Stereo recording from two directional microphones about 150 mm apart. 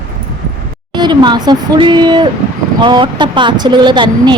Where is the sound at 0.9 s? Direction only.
30° right (ahead or behind).